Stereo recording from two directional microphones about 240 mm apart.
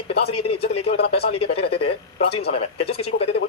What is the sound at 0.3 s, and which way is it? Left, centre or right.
Speech, left.